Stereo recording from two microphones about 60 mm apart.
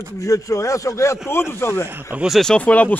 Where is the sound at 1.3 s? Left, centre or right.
Left.